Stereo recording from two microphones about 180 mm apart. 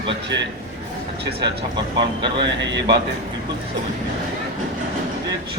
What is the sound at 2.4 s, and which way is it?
Speech, 80° right.